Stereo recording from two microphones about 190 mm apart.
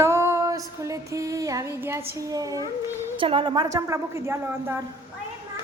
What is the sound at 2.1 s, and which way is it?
A woman's voice, 20° right (ahead or behind).